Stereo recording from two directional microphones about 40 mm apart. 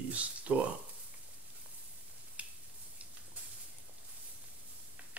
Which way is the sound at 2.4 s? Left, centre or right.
Right.